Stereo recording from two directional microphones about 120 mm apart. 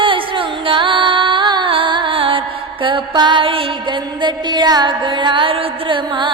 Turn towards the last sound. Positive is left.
turn(degrees=-40)  # may be behind; listen again after turning